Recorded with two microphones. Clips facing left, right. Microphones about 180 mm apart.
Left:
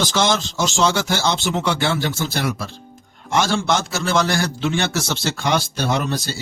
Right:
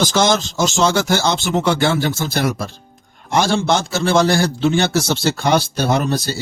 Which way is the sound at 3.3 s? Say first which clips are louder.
Right 3 dB; 30° right (ahead or behind).